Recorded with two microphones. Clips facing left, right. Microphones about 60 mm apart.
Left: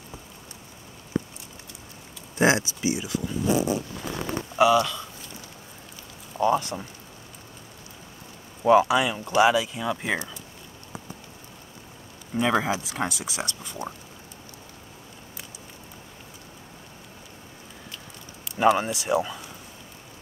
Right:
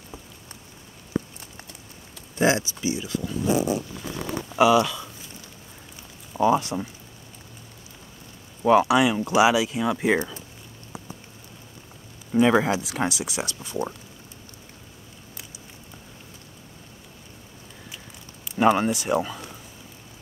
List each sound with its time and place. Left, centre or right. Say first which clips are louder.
2.3 s speech: even; left
4.5 s a sound: right 1 dB; centre
4.7 s speech: right 2 dB; centre
6.3 s speech: right 2 dB; centre
8.6 s speech: right 1 dB; centre
12.4 s speech: right 4 dB; centre
18.6 s speech: right 1 dB; centre